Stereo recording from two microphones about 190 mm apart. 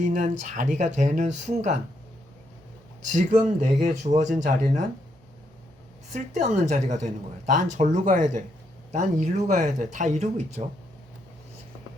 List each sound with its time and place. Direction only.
0.0 s a woman's voice: 40° right (ahead or behind)
3.1 s a woman's voice: 40° right (ahead or behind)
6.1 s a woman's voice: 35° right (ahead or behind)